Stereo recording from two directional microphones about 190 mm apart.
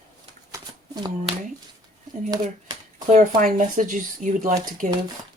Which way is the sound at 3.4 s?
45° right (ahead or behind).